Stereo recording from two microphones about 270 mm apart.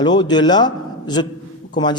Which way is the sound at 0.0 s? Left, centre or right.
Centre.